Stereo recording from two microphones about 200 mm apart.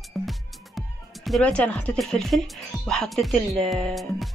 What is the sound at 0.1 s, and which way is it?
Speech, centre (ahead or behind).